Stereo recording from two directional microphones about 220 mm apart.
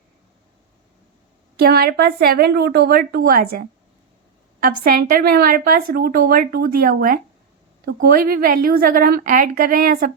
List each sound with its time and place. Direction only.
1.5 s a woman's voice: 45° right (ahead or behind)
4.6 s speech: 45° right (ahead or behind)